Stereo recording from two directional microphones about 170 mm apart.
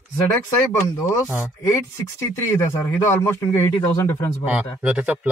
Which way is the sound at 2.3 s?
15° left (ahead or behind).